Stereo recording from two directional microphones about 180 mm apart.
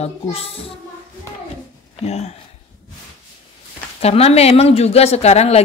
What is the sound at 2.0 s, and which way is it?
Speech, 40° left (ahead or behind).